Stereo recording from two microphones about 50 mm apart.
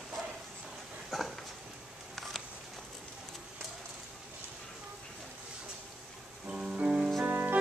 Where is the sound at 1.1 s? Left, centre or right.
Centre.